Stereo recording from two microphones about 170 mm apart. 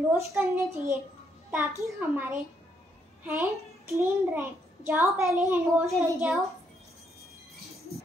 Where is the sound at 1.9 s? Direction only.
10° right (ahead or behind).